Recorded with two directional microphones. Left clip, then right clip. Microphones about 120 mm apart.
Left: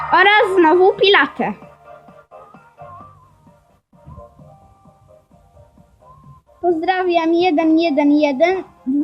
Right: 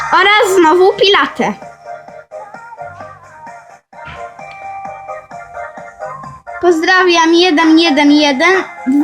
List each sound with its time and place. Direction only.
0.1 s a woman's voice: 15° right (ahead or behind)
6.7 s a woman's voice: 5° right (ahead or behind)